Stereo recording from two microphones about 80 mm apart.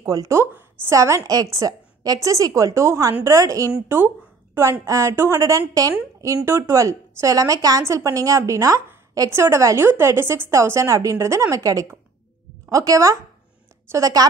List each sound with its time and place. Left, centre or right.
0.0 s a woman's voice: right
0.4 s a woman's voice: right
0.9 s a woman's voice: right
4.8 s a woman's voice: right
6.4 s a woman's voice: right